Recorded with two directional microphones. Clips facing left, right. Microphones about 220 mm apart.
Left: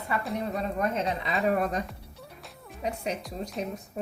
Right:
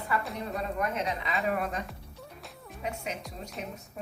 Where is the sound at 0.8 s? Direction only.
30° left (ahead or behind).